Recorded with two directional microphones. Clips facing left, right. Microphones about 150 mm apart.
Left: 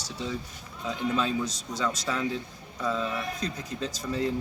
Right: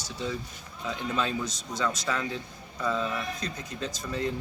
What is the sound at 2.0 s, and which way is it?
Speech, 10° left (ahead or behind).